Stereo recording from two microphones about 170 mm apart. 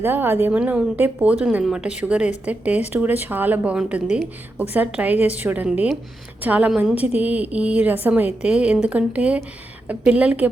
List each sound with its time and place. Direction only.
0.0 s a woman's voice: 10° right (ahead or behind)